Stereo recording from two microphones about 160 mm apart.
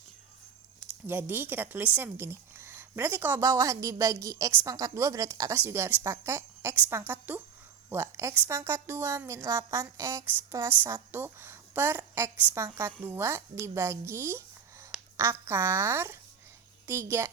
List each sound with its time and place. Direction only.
1.0 s speech: 10° right (ahead or behind)